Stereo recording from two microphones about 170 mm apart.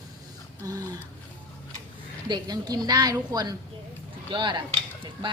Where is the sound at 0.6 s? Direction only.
20° right (ahead or behind).